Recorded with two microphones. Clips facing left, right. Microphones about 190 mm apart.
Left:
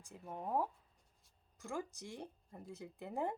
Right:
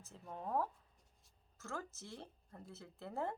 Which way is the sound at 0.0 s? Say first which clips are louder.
Left 2 dB; 15° left (ahead or behind).